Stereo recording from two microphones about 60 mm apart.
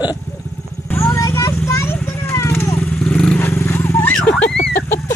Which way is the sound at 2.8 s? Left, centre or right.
Centre.